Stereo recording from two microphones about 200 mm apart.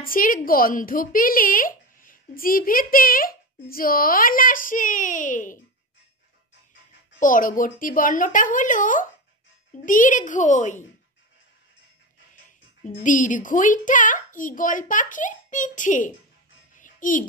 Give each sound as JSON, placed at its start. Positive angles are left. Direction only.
{"t": 0.0, "sound": "speech", "side_deg": 45}
{"t": 7.2, "sound": "a woman's voice", "side_deg": 40}
{"t": 13.0, "sound": "a woman's voice", "side_deg": 40}
{"t": 16.7, "sound": "music", "side_deg": 40}